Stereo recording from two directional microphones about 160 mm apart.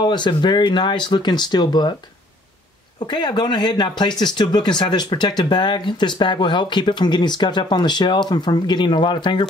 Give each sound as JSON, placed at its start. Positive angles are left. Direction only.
{"t": 0.0, "sound": "speech", "side_deg": 30}
{"t": 3.0, "sound": "speech", "side_deg": 25}